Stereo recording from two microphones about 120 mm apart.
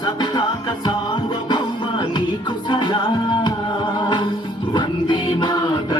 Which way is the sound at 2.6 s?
40° left (ahead or behind).